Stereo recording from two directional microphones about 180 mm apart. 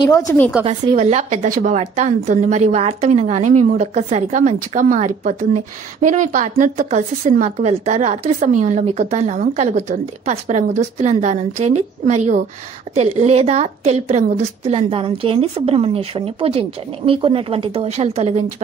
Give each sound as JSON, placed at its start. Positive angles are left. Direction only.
{"t": 0.3, "sound": "a woman's voice", "side_deg": 10}
{"t": 0.7, "sound": "a woman's voice", "side_deg": -35}